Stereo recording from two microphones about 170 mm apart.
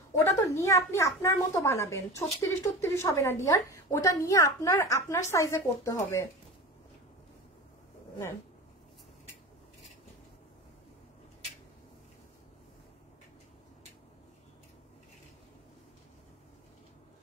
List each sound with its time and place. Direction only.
0.2 s a child's voice: 20° left (ahead or behind)